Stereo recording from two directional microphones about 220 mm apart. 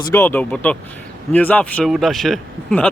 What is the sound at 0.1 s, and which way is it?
Speech, 10° left (ahead or behind).